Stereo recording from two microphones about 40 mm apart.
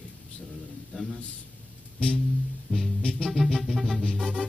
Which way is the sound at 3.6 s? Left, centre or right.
Centre.